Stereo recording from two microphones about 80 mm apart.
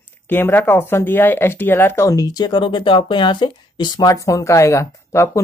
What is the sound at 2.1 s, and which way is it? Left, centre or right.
Speech, left.